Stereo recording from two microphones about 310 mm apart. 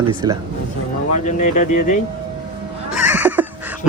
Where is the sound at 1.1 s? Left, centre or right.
Left.